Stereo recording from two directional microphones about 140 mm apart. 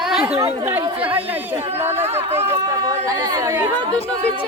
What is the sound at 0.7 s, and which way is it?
Speech, 15° right (ahead or behind).